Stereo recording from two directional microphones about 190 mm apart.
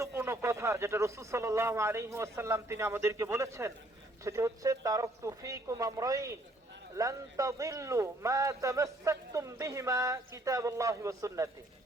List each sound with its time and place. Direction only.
0.0 s speech: 15° right (ahead or behind)